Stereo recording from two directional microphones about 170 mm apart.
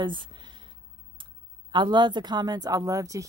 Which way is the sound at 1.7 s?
25° right (ahead or behind).